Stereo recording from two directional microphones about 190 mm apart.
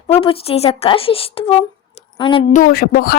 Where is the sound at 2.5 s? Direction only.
50° left (ahead or behind).